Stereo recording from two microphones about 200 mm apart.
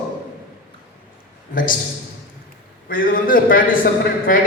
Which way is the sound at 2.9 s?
45° left (ahead or behind).